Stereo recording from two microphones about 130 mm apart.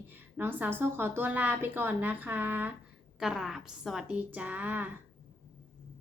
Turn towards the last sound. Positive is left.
turn(degrees=-15)  # may be behind; listen again after turning